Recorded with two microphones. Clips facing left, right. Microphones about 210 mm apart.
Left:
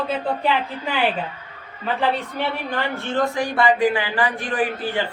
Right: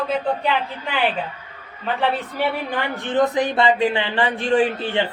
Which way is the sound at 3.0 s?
20° right (ahead or behind).